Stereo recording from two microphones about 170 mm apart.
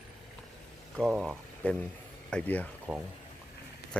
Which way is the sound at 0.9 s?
5° right (ahead or behind).